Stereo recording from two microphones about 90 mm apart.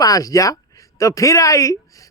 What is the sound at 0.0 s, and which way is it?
Speech, 40° left (ahead or behind).